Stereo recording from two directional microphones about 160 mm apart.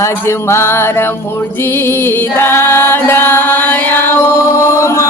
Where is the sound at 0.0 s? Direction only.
15° left (ahead or behind).